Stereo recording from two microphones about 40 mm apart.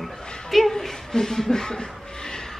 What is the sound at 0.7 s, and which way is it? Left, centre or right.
Speech, centre.